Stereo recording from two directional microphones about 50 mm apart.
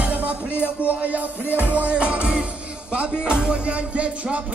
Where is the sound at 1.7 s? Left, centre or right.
Right.